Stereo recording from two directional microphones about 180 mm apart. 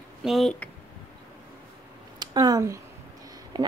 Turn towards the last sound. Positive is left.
turn(degrees=-25)  # may be behind; listen again after turning